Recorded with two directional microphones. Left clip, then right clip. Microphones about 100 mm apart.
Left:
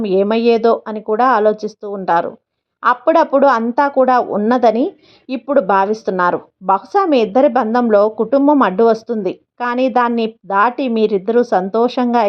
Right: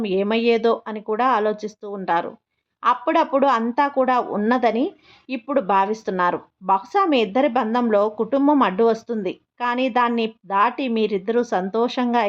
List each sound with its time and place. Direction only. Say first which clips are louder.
0.0 s a woman's voice: left 6 dB; 35° left (ahead or behind)